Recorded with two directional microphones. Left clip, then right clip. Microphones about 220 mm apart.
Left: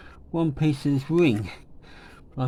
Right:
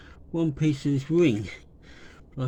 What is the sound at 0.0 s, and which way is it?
Speech, 25° left (ahead or behind).